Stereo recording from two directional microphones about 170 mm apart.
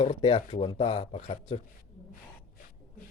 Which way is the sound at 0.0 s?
35° left (ahead or behind).